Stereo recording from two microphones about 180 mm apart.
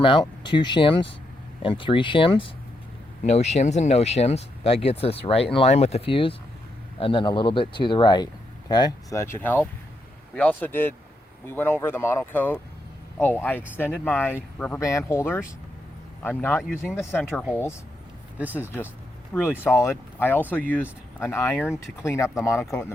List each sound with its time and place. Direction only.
0.0 s speech: 25° left (ahead or behind)
19.3 s speech: 15° left (ahead or behind)